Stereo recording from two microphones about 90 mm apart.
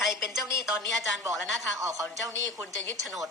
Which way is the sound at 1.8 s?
40° right (ahead or behind).